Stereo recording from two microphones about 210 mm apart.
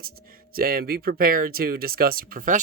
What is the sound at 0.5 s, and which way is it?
Speech, 45° right (ahead or behind).